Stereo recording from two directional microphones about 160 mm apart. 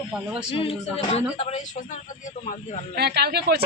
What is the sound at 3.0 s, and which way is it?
Speech, 90° right.